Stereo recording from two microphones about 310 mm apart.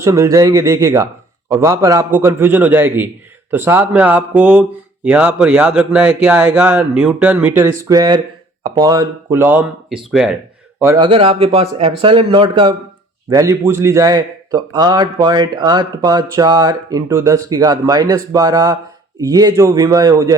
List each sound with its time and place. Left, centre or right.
0.0 s a man's voice: centre